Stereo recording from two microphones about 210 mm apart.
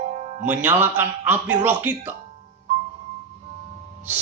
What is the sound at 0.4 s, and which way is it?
A man's voice, 10° right (ahead or behind).